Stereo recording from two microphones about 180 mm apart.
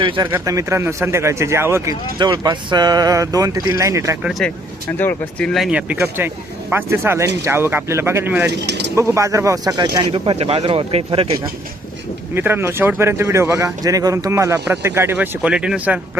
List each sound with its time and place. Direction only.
0.0 s speech: 30° right (ahead or behind)
0.3 s speech: 15° right (ahead or behind)
4.2 s speech: centre (ahead or behind)
8.4 s speech: 70° right (ahead or behind)
9.0 s speech: 15° right (ahead or behind); by 11.3 s 30° right (ahead or behind)
12.3 s speech: 10° right (ahead or behind)